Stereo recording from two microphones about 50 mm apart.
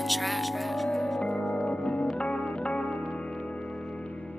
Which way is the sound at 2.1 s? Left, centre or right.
Centre.